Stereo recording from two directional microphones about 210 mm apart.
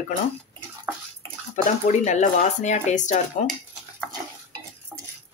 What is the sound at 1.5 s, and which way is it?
Speech, 35° left (ahead or behind).